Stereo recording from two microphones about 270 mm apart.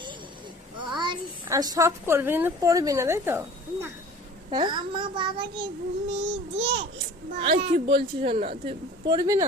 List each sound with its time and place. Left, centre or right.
0.8 s a woman's voice: centre
7.5 s speech: right
7.9 s a child's voice: right